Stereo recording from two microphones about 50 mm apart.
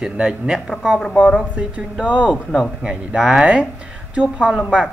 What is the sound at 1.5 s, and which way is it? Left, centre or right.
Speech, right.